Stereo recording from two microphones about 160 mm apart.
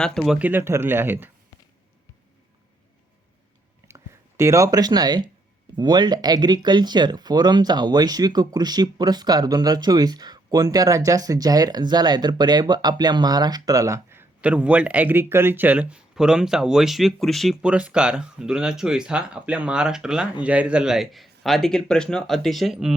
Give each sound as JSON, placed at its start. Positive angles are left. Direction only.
{"t": 0.0, "sound": "speech", "side_deg": 5}
{"t": 3.8, "sound": "speech", "side_deg": -15}